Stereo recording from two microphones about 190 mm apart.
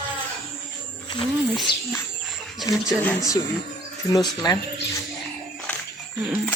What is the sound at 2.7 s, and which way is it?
Speech, 15° left (ahead or behind).